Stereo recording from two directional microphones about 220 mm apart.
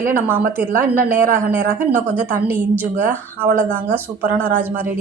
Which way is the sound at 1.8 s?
10° right (ahead or behind).